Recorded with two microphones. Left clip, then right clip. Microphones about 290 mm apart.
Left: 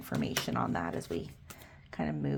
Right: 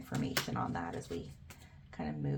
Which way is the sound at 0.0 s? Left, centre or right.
Left.